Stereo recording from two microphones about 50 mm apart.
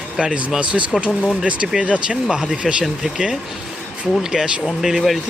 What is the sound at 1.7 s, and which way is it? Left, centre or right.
Speech, right.